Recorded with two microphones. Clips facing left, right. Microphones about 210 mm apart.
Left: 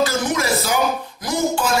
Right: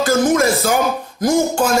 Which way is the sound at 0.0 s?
50° right (ahead or behind).